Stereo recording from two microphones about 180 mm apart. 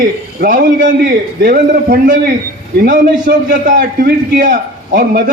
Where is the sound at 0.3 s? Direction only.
50° right (ahead or behind).